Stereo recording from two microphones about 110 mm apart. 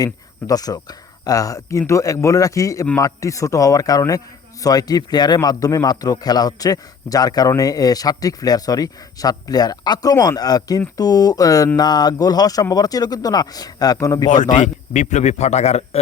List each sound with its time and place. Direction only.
0.0 s a man's voice: 35° left (ahead or behind)
14.5 s a man's voice: 90° left